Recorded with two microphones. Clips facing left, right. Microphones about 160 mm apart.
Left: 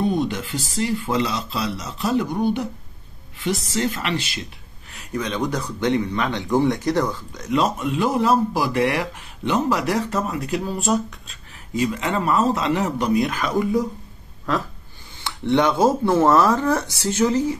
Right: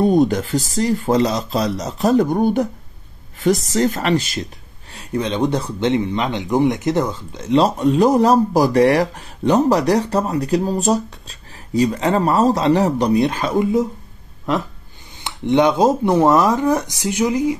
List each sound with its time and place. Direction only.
0.0 s speech: 45° right (ahead or behind)
4.9 s speech: 30° right (ahead or behind)